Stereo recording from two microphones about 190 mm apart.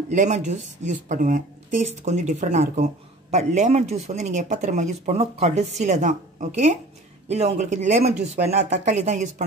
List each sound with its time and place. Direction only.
0.1 s speech: 40° right (ahead or behind)